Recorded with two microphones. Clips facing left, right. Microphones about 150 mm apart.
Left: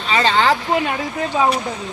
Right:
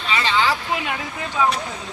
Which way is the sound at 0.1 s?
40° left (ahead or behind).